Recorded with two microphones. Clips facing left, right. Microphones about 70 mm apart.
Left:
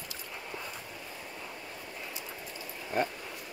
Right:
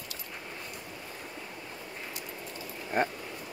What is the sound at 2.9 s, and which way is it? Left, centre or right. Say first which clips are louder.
Speech: right 2 dB; right.